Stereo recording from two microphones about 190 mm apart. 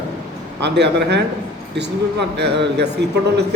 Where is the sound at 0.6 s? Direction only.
65° right (ahead or behind).